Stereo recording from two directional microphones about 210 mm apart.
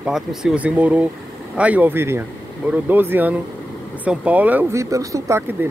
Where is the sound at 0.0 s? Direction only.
Centre (ahead or behind).